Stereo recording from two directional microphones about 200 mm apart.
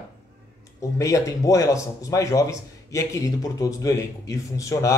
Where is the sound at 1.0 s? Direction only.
15° left (ahead or behind).